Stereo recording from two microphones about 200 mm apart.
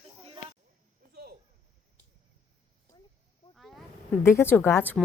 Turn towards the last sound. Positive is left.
turn(degrees=10)  # may be behind; listen again after turning